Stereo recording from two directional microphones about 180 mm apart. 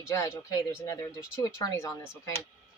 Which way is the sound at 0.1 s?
15° left (ahead or behind).